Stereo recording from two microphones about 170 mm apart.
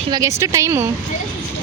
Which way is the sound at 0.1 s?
20° right (ahead or behind).